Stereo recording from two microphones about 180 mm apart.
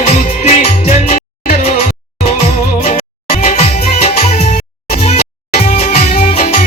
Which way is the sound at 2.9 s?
40° left (ahead or behind).